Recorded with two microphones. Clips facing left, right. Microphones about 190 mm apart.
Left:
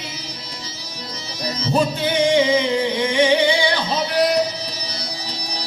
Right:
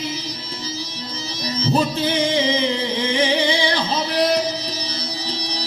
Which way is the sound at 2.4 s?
30° right (ahead or behind).